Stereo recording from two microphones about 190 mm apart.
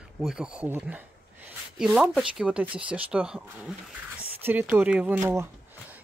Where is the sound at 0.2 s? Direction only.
5° right (ahead or behind).